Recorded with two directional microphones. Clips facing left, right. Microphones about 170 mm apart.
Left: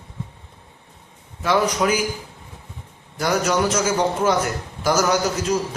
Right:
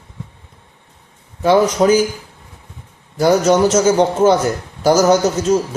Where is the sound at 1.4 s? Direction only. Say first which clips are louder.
Right 7 dB; 30° right (ahead or behind).